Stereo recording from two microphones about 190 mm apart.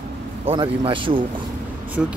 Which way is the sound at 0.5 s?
25° right (ahead or behind).